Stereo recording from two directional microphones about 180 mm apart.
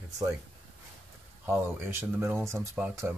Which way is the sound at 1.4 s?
15° right (ahead or behind).